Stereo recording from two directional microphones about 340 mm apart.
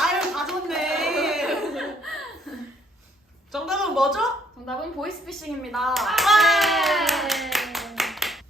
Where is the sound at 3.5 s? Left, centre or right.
Centre.